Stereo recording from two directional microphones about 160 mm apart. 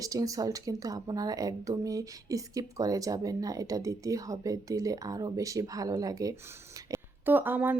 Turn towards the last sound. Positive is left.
turn(degrees=-10)  # may be behind; listen again after turning